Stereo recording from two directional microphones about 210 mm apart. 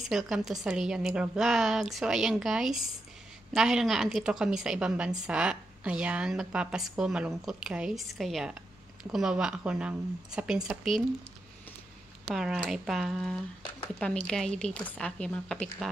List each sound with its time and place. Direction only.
0.0 s a woman's voice: centre (ahead or behind)
12.3 s a woman's voice: centre (ahead or behind)